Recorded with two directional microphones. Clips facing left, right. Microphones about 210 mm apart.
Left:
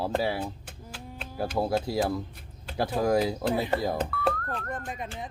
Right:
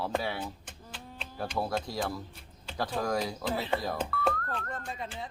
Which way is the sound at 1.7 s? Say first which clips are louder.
Left 6 dB; 5° left (ahead or behind).